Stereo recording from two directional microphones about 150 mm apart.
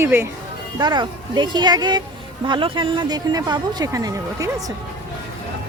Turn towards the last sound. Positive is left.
turn(degrees=-20)  # may be behind; listen again after turning